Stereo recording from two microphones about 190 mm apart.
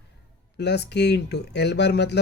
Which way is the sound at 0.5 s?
60° left (ahead or behind).